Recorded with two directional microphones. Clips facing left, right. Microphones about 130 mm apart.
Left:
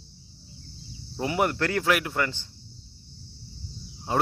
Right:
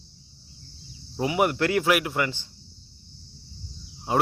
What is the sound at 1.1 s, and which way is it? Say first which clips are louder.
A man's voice: right 2 dB; 15° right (ahead or behind).